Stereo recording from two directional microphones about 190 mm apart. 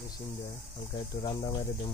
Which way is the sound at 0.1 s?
25° left (ahead or behind).